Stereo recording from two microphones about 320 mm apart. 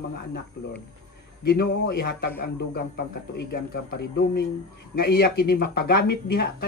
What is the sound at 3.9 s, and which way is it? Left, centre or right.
Speech, left.